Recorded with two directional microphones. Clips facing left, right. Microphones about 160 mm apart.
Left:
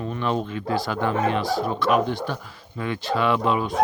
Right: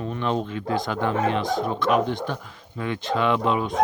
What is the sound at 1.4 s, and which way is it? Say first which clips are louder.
Speech: even; 5° left (ahead or behind).